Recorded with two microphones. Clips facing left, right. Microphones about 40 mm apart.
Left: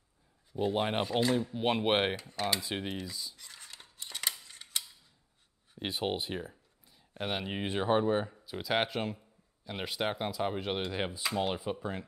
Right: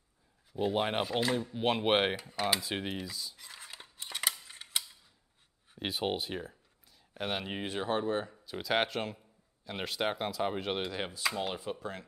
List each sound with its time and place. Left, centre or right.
0.5 s speech: centre
3.3 s scissors: centre
4.5 s mechanisms: centre
5.8 s speech: centre
6.9 s a sound: centre
7.6 s speech: centre
10.9 s speech: centre